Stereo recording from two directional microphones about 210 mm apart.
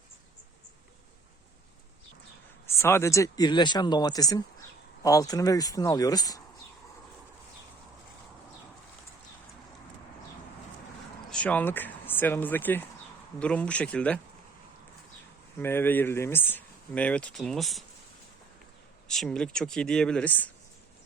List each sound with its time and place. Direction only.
2.6 s speech: 10° left (ahead or behind)
11.3 s speech: 5° left (ahead or behind)
15.5 s speech: 10° left (ahead or behind)
19.0 s speech: 5° left (ahead or behind)